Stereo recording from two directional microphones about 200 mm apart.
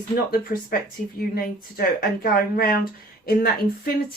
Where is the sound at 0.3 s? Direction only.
45° left (ahead or behind).